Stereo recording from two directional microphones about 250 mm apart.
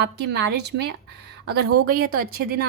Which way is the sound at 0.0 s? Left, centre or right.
Right.